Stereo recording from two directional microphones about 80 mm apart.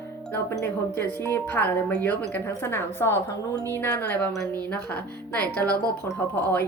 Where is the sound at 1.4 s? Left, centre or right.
Left.